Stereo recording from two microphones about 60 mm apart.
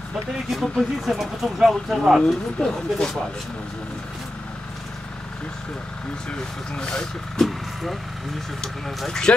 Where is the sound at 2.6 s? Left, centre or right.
Centre.